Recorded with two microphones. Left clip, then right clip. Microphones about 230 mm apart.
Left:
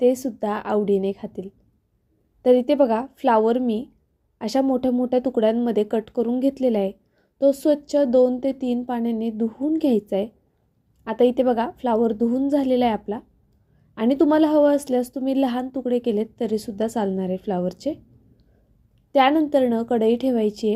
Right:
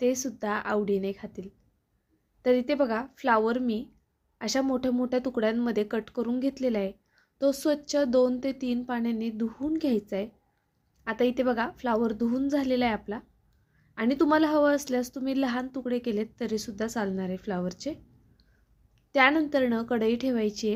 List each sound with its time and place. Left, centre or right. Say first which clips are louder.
0.0 s a woman's voice: left 8 dB; centre
19.1 s a woman's voice: left 5 dB; centre